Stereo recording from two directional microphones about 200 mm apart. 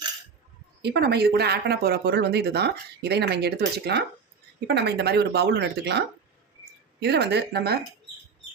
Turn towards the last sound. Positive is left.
turn(degrees=-55)  # may be behind; listen again after turning